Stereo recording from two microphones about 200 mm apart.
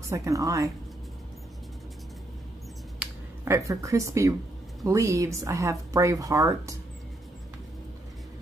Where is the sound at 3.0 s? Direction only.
15° right (ahead or behind).